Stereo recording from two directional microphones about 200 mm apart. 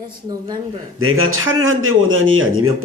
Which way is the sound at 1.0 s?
90° right.